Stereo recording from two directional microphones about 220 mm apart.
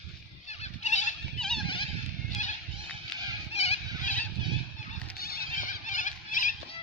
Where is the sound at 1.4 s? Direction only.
5° left (ahead or behind).